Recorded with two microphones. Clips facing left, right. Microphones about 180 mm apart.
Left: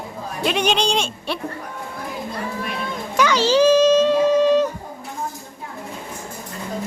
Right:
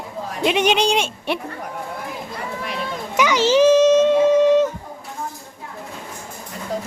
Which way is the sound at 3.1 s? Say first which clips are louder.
Right 1 dB; 20° right (ahead or behind).